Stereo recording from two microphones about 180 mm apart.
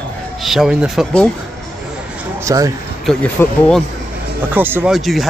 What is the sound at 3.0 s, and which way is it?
Speech, 5° left (ahead or behind).